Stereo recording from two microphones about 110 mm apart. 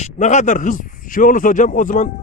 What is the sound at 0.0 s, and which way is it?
Speech, 90° left.